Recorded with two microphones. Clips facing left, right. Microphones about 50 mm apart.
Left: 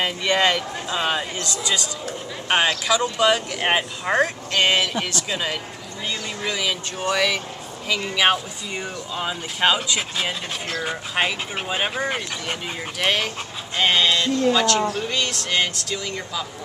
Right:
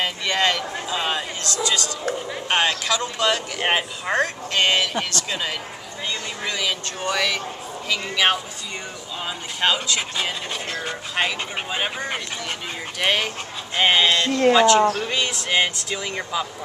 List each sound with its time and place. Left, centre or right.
0.0 s speech: centre
2.9 s speech: centre
13.7 s speech: centre
14.2 s speech: right
14.5 s speech: centre